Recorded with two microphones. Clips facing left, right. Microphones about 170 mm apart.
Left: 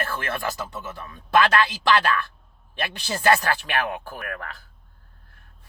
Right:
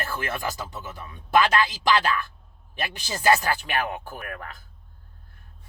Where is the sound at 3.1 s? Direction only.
15° right (ahead or behind).